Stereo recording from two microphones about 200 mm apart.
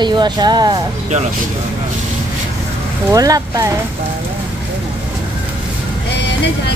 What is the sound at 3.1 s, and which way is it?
Speech, 20° right (ahead or behind).